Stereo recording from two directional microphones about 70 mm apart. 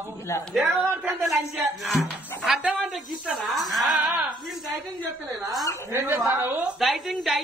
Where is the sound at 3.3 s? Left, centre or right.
Centre.